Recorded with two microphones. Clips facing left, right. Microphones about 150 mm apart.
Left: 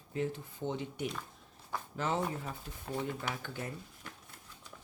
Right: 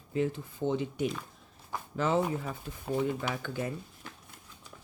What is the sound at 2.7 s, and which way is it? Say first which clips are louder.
Speech: right 8 dB; 90° right.